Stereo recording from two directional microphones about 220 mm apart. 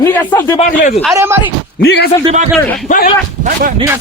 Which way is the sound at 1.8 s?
50° left (ahead or behind).